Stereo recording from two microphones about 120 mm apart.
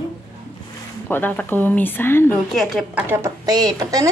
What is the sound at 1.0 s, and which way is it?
Speech, 15° left (ahead or behind).